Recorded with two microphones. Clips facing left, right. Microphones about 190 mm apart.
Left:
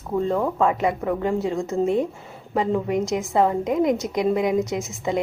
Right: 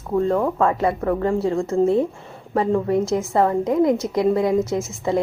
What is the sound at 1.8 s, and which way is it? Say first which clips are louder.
Speech: right 3 dB; 30° right (ahead or behind).